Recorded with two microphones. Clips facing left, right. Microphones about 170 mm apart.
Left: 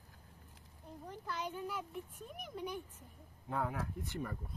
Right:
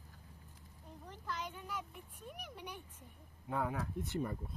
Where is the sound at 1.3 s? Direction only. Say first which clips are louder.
Left 3 dB; 35° left (ahead or behind).